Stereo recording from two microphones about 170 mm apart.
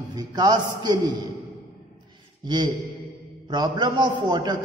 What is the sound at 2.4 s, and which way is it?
A man's voice, 25° right (ahead or behind).